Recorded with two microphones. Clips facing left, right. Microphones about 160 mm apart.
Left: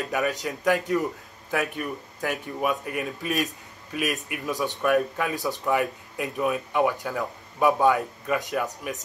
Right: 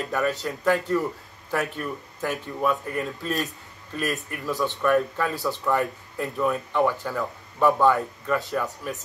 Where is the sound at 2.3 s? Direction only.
15° left (ahead or behind).